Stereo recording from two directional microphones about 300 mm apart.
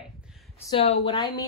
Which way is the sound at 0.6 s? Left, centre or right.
Centre.